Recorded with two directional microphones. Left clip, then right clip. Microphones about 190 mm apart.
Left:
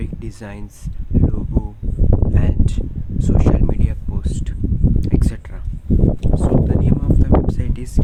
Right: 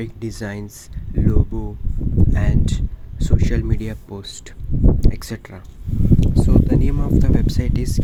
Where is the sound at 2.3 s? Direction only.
25° right (ahead or behind).